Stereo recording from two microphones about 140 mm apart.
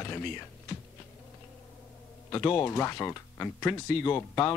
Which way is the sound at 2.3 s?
20° left (ahead or behind).